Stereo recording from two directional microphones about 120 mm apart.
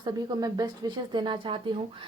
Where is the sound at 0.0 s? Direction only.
35° right (ahead or behind).